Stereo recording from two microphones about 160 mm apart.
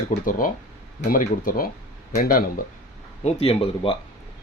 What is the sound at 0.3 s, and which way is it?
Speech, 60° left (ahead or behind).